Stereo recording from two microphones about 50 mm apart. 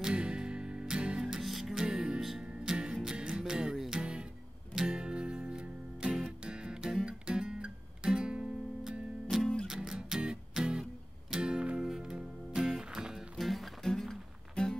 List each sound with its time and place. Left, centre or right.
0.0 s music: centre
1.2 s music: centre
13.4 s music: centre